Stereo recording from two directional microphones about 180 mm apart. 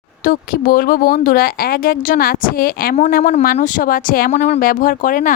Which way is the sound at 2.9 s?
45° left (ahead or behind).